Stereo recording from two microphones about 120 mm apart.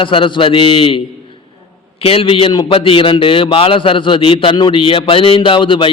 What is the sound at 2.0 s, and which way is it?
A man's voice, 50° left (ahead or behind).